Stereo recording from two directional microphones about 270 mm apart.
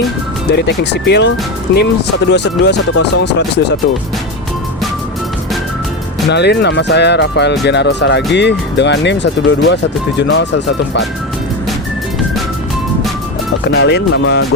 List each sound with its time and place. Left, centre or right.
0.5 s speech: left
6.2 s speech: left
13.7 s speech: left